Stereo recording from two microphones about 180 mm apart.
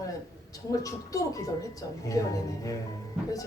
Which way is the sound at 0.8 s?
20° left (ahead or behind).